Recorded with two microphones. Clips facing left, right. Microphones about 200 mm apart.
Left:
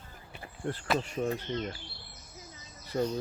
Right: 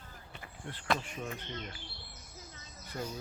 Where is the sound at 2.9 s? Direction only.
40° left (ahead or behind).